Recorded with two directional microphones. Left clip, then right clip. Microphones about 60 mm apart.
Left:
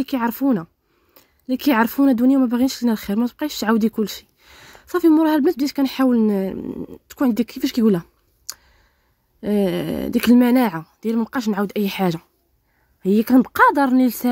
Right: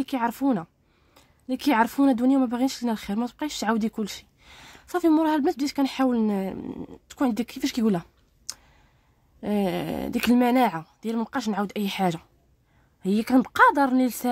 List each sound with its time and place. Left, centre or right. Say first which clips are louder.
0.0 s speech: left 4 dB; left
3.3 s speech: left 4 dB; left
6.1 s speech: left 7 dB; left
6.6 s speech: left 6 dB; centre
7.1 s speech: left 5 dB; left
7.5 s a sound: left 7 dB; left
9.4 s speech: left 6 dB; left
13.0 s speech: left 6 dB; left